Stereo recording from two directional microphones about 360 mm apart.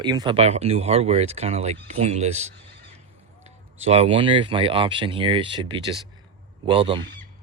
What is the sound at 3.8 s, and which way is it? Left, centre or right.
Speech, centre.